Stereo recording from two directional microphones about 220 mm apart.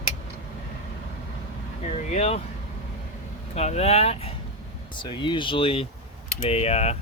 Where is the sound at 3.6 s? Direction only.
30° left (ahead or behind).